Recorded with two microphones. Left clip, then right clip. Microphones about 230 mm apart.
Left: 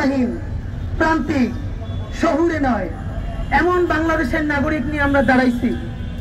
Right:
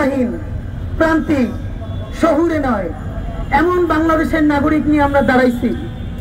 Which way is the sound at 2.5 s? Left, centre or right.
Right.